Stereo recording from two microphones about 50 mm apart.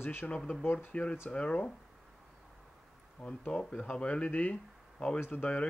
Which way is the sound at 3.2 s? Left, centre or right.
Left.